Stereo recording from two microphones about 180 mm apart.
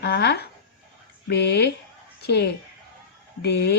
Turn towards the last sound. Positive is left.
turn(degrees=65)  # may be behind; listen again after turning